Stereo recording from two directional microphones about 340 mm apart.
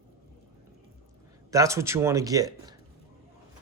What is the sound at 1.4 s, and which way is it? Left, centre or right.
Speech, centre.